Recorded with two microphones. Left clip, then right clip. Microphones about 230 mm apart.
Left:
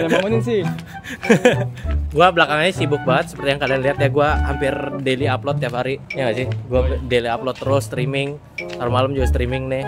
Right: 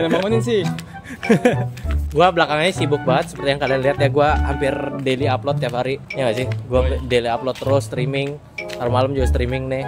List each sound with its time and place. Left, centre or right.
0.3 s speech: centre
1.3 s speech: left
2.1 s speech: centre